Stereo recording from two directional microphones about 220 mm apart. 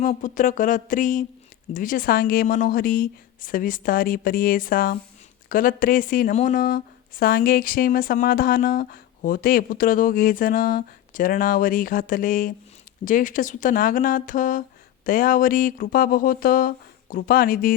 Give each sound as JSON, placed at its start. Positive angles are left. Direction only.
{"t": 0.0, "sound": "speech", "side_deg": 35}